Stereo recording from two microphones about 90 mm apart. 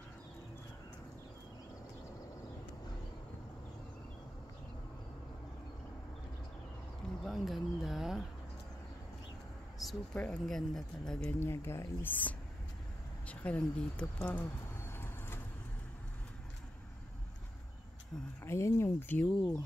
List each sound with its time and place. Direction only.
7.2 s a sound: centre (ahead or behind)
9.8 s a sound: centre (ahead or behind)
10.1 s speech: 15° left (ahead or behind)
10.4 s speech: 5° left (ahead or behind)
11.3 s speech: 25° left (ahead or behind)
14.9 s vehicle: 25° left (ahead or behind)
18.4 s speech: 30° left (ahead or behind)